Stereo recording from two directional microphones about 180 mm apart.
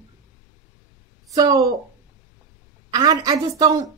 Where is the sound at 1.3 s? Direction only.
20° right (ahead or behind).